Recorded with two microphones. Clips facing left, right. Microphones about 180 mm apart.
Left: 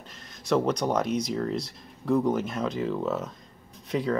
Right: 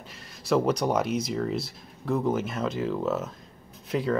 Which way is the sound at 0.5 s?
5° right (ahead or behind).